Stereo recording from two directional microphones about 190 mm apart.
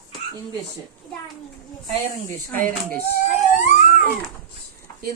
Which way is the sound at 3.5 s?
40° left (ahead or behind).